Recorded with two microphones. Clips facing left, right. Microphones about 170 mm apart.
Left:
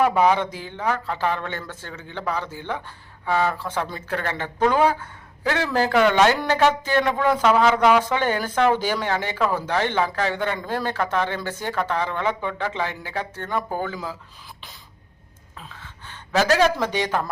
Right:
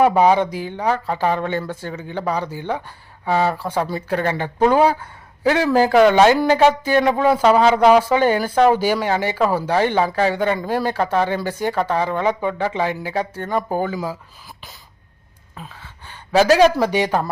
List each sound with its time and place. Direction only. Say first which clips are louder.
0.0 s speech: right 4 dB; 30° right (ahead or behind)
0.3 s speech: right 6 dB; 10° right (ahead or behind)
7.4 s speech: right 4 dB; 30° right (ahead or behind)
8.0 s speech: right 6 dB; 10° right (ahead or behind)
10.9 s speech: right 3 dB; 35° right (ahead or behind)
11.3 s speech: right 6 dB; 10° right (ahead or behind)
13.5 s speech: right 4 dB; 45° right (ahead or behind)
13.8 s speech: right 6 dB; 10° right (ahead or behind)
16.0 s a sound: right 6 dB; 10° right (ahead or behind)
16.8 s speech: right 5 dB; 10° right (ahead or behind)